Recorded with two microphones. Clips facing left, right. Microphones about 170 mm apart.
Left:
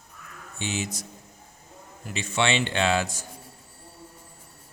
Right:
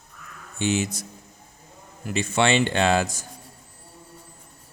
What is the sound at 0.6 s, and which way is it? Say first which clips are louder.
Speech: right 7 dB; 55° right (ahead or behind).